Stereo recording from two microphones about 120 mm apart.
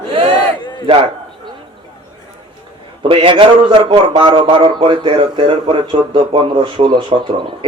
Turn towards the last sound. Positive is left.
turn(degrees=-45)  # may be behind; listen again after turning